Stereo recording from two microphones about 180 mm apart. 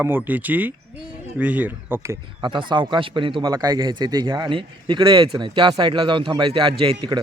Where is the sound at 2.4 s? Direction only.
25° right (ahead or behind).